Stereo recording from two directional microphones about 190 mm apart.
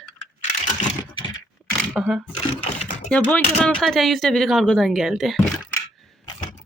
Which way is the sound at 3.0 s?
5° left (ahead or behind).